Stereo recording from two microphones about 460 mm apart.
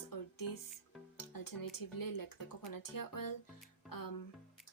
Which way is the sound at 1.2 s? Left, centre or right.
Left.